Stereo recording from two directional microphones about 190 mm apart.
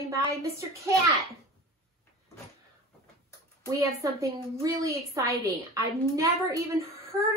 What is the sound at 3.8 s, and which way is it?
A woman's voice, 15° right (ahead or behind).